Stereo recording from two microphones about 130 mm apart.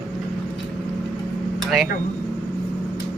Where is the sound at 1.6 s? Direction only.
Centre (ahead or behind).